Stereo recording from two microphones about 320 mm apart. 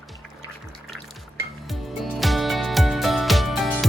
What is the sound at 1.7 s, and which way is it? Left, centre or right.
Music, centre.